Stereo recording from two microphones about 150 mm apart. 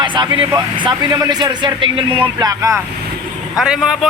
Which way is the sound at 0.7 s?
30° right (ahead or behind).